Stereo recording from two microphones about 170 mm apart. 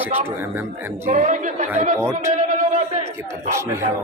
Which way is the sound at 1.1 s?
45° right (ahead or behind).